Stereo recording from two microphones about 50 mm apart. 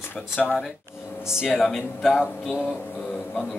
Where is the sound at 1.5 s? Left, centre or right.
Centre.